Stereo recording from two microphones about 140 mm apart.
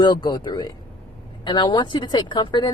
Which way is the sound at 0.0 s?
30° left (ahead or behind).